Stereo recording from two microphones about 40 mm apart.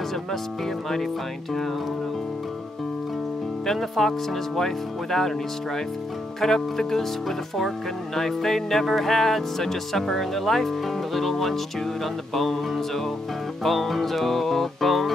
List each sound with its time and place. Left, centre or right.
3.6 s speech: centre
6.4 s speech: centre
11.1 s music: centre